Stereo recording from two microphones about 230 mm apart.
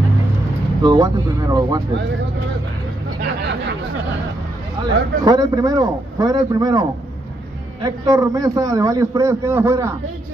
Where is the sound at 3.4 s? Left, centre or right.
Right.